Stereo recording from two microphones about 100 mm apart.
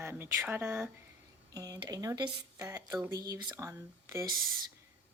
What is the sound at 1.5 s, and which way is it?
Speech, 40° right (ahead or behind).